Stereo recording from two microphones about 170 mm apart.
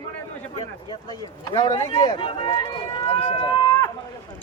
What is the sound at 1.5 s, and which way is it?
Speech, 25° left (ahead or behind).